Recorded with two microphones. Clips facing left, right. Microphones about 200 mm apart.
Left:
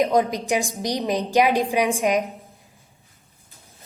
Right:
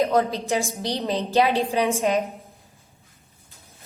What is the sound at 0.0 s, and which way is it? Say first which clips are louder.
A woman's voice: left 1 dB; 15° left (ahead or behind).